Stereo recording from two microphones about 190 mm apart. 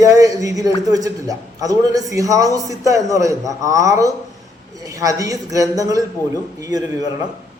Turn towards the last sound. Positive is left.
turn(degrees=-20)  # may be behind; listen again after turning